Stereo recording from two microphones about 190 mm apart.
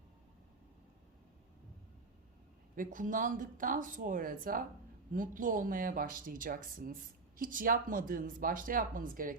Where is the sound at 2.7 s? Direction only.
45° right (ahead or behind).